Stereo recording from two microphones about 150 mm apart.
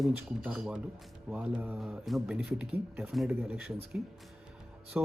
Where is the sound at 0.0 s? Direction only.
Centre (ahead or behind).